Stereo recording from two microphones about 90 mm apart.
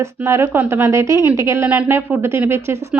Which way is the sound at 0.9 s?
35° right (ahead or behind).